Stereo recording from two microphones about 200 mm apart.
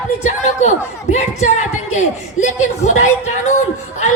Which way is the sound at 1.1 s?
35° left (ahead or behind).